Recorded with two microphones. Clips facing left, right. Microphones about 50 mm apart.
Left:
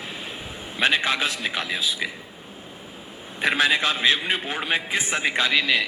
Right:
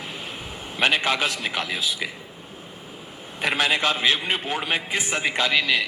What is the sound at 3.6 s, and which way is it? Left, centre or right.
Speech, right.